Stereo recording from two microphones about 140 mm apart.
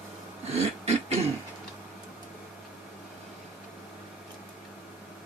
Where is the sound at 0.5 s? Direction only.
50° right (ahead or behind).